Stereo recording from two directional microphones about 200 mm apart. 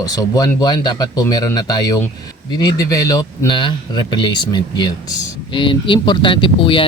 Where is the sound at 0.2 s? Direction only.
20° left (ahead or behind).